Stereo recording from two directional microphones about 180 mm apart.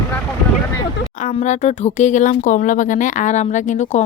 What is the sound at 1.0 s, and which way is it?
Speech, 40° left (ahead or behind).